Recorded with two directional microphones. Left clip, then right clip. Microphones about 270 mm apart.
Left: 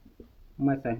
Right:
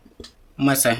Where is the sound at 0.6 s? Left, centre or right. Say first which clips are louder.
Right 9 dB; right.